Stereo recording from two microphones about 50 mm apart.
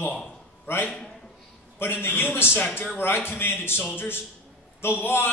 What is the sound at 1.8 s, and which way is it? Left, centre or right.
A man's voice, left.